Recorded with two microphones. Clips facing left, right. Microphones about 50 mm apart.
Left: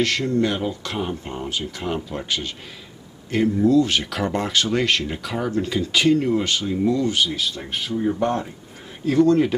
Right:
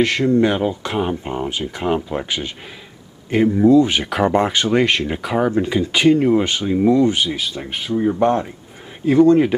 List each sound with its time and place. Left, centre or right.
0.0 s speech: centre